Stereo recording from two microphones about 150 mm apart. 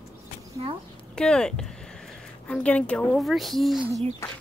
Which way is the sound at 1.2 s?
5° left (ahead or behind).